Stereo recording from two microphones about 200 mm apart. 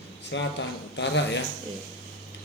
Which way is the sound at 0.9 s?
60° left (ahead or behind).